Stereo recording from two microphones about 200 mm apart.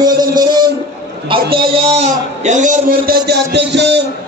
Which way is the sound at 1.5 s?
30° right (ahead or behind).